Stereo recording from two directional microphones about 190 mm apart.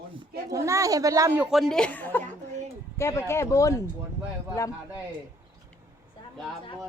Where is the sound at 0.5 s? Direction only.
15° right (ahead or behind); by 3.8 s 15° left (ahead or behind).